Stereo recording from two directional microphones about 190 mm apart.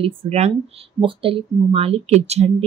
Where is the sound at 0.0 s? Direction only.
30° right (ahead or behind).